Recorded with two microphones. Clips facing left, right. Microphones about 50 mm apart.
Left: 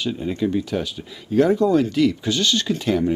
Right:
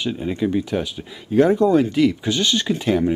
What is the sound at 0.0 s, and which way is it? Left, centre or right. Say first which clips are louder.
Speech: right 1 dB; centre.